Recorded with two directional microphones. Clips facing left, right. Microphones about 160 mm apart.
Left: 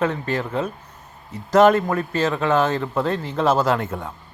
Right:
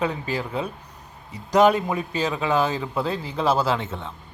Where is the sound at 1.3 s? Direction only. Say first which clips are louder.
Left 3 dB; 15° right (ahead or behind).